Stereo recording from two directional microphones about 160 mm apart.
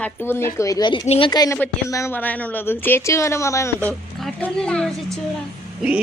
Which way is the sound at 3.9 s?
5° left (ahead or behind).